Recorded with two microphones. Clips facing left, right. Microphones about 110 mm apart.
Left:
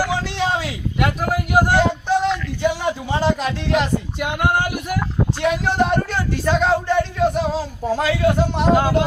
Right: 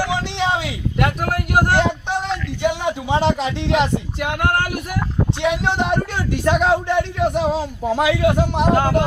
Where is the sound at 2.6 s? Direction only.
20° right (ahead or behind).